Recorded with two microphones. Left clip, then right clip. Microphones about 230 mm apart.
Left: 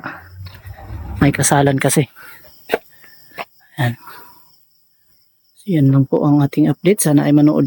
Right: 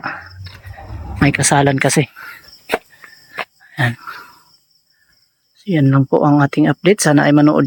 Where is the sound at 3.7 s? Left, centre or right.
Centre.